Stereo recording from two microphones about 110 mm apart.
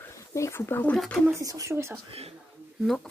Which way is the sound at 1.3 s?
30° right (ahead or behind).